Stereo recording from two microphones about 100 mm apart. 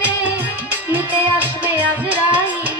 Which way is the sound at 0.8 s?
15° right (ahead or behind).